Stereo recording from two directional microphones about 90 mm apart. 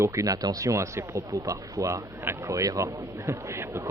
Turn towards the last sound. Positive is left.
turn(degrees=-30)  # may be behind; listen again after turning